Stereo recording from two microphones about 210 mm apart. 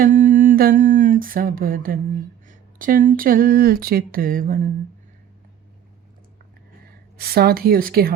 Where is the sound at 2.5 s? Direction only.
40° right (ahead or behind).